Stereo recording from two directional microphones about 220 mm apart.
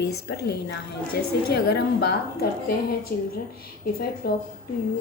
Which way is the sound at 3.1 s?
40° left (ahead or behind).